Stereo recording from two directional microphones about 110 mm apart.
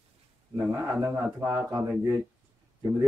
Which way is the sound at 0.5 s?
25° right (ahead or behind).